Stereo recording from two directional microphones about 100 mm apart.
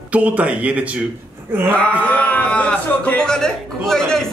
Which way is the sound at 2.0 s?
15° left (ahead or behind).